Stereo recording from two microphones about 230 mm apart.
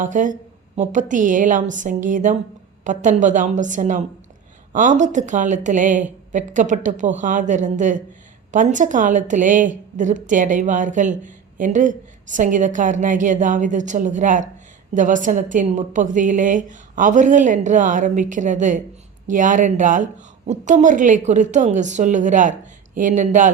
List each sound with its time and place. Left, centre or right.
0.0 s a woman's voice: right